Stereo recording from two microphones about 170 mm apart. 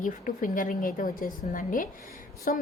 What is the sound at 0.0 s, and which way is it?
A woman's voice, 50° left (ahead or behind).